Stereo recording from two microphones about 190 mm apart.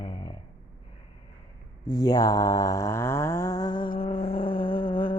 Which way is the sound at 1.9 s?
20° left (ahead or behind).